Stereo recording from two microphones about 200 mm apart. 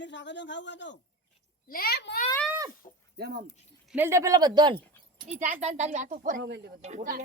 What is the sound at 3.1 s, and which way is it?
Speech, 50° right (ahead or behind).